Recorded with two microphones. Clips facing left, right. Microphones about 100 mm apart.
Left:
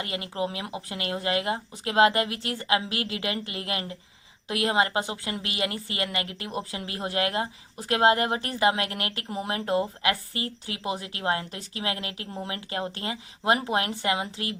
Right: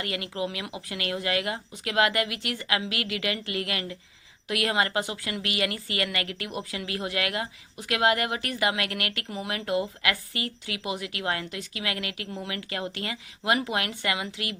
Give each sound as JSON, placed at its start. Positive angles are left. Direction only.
{"t": 0.0, "sound": "a woman's voice", "side_deg": 25}